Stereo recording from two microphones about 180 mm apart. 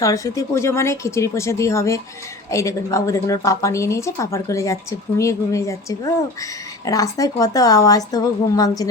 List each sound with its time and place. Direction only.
0.0 s a woman's voice: 20° left (ahead or behind)